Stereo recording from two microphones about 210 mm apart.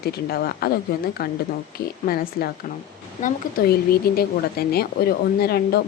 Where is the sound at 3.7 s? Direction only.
45° left (ahead or behind).